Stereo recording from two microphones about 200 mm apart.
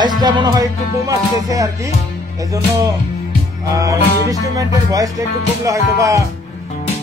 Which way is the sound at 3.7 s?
15° right (ahead or behind).